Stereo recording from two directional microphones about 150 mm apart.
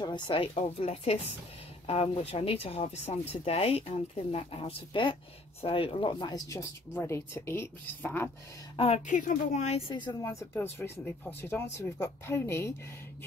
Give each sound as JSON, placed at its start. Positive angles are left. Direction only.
{"t": 0.0, "sound": "speech", "side_deg": 35}
{"t": 8.7, "sound": "a woman's voice", "side_deg": 45}
{"t": 10.5, "sound": "speech", "side_deg": 15}